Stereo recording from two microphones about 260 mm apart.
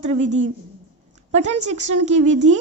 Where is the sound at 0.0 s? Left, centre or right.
Right.